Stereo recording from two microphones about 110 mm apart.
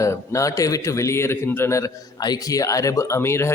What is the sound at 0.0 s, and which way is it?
A man's voice, 30° left (ahead or behind).